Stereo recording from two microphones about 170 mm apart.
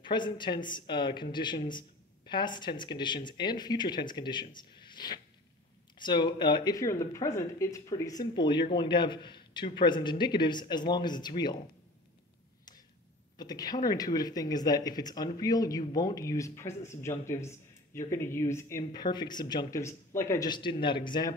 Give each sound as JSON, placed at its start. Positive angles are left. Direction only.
{"t": 0.0, "sound": "speech", "side_deg": 25}
{"t": 13.4, "sound": "speech", "side_deg": 25}